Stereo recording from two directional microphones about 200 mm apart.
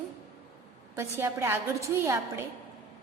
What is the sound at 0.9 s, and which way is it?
A woman's voice, 15° right (ahead or behind).